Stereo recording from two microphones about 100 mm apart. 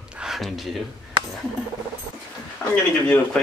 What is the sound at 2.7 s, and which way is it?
Speech, 15° left (ahead or behind).